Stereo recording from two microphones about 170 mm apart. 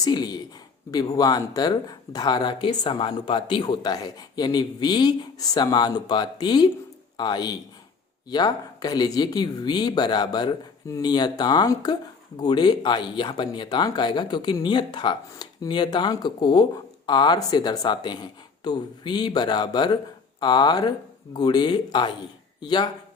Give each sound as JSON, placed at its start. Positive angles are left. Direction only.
{"t": 0.0, "sound": "speech", "side_deg": 25}